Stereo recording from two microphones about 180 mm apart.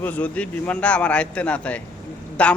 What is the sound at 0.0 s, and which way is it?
A man's voice, 10° left (ahead or behind).